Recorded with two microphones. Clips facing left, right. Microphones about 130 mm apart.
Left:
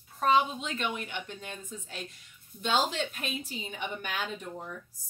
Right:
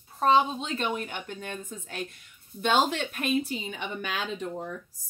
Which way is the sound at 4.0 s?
90° right.